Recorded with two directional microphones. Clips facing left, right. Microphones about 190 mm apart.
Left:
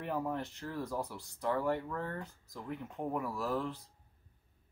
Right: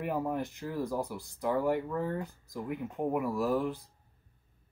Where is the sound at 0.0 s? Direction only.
10° right (ahead or behind).